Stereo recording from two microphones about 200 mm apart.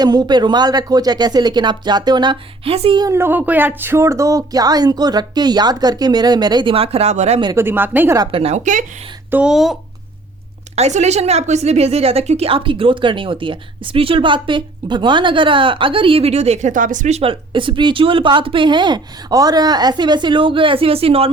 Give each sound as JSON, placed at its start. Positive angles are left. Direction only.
{"t": 0.0, "sound": "a woman's voice", "side_deg": -20}
{"t": 7.4, "sound": "a woman's voice", "side_deg": -10}
{"t": 8.3, "sound": "speech", "side_deg": -30}
{"t": 9.3, "sound": "speech", "side_deg": -5}
{"t": 10.8, "sound": "a woman's voice", "side_deg": -35}